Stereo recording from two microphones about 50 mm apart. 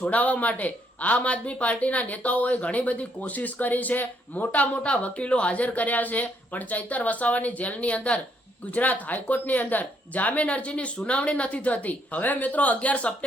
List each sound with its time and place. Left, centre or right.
0.1 s speech: left